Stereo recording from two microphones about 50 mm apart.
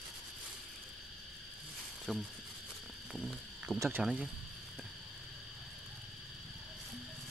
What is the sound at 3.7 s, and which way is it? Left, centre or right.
Speech, centre.